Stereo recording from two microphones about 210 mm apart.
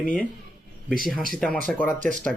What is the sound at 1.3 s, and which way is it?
Speech, 5° left (ahead or behind).